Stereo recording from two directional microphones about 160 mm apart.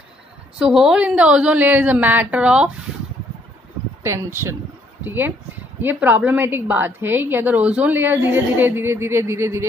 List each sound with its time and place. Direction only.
0.6 s a woman's voice: 5° right (ahead or behind)
4.0 s a woman's voice: 15° right (ahead or behind)